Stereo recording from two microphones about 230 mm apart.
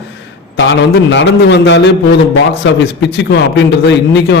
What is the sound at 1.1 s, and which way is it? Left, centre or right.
Speech, left.